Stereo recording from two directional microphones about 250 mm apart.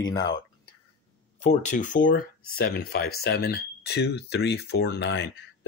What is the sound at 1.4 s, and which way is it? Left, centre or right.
Speech, left.